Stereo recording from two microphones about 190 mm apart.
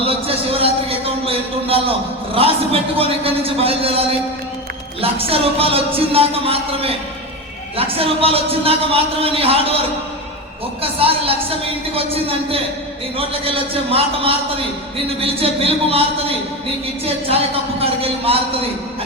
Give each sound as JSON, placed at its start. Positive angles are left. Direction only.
{"t": 0.1, "sound": "a man's voice", "side_deg": -30}
{"t": 10.9, "sound": "a man's voice", "side_deg": -30}